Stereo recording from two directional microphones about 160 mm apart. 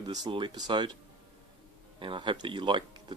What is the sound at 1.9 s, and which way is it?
Speech, 30° right (ahead or behind).